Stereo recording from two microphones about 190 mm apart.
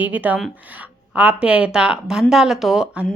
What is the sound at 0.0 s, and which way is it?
A woman's voice, 10° right (ahead or behind).